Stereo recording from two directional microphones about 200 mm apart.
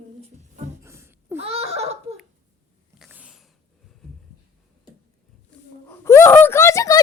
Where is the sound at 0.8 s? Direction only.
15° right (ahead or behind).